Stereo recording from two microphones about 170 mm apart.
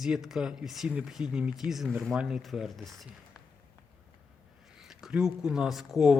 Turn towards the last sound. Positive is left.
turn(degrees=0)  # may be behind; listen again after turning